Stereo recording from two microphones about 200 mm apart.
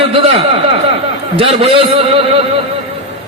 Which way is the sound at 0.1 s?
30° right (ahead or behind).